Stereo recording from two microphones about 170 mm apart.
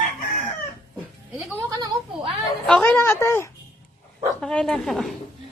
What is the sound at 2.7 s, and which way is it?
Speech, 10° left (ahead or behind).